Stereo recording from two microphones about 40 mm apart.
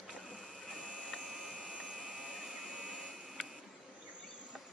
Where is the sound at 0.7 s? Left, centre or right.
Right.